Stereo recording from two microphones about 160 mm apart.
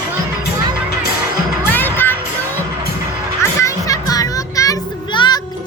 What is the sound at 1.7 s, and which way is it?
Music, 10° left (ahead or behind).